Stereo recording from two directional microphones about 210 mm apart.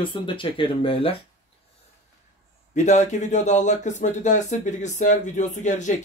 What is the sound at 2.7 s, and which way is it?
Speech, 35° left (ahead or behind).